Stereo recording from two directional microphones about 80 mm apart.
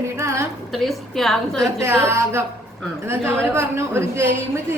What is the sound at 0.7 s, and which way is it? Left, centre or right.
Speech, centre.